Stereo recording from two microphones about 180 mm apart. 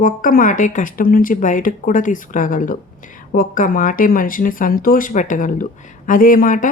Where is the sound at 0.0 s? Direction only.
50° left (ahead or behind).